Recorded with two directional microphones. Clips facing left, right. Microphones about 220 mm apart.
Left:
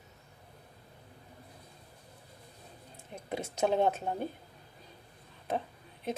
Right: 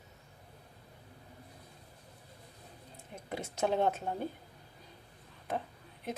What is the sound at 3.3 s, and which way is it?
Speech, 20° left (ahead or behind).